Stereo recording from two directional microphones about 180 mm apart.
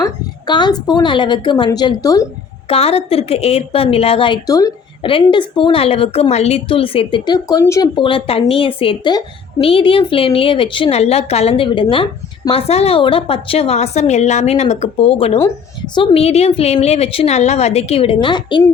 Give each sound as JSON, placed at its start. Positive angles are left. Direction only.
{"t": 0.0, "sound": "a woman's voice", "side_deg": 25}
{"t": 2.6, "sound": "a woman's voice", "side_deg": 35}